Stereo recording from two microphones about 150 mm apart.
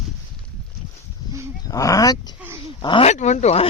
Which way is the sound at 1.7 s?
20° left (ahead or behind).